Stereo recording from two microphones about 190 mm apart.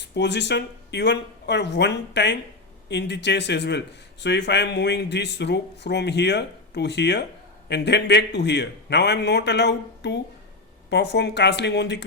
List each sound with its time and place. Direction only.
0.1 s speech: 65° left (ahead or behind)